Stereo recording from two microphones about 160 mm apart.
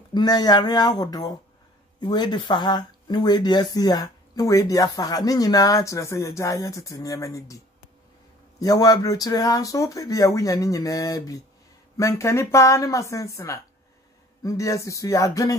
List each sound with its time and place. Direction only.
0.1 s speech: 25° left (ahead or behind)